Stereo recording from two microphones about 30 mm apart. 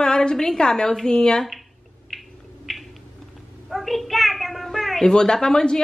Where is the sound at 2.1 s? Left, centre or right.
Centre.